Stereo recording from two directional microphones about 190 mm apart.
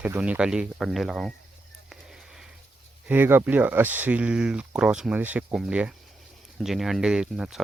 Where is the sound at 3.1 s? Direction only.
10° right (ahead or behind).